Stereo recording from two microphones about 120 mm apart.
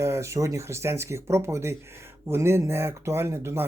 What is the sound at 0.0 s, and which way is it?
Speech, 25° right (ahead or behind).